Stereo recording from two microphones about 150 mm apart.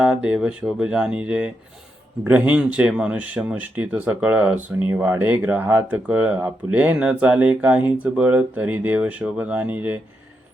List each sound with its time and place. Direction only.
0.0 s speech: 5° right (ahead or behind)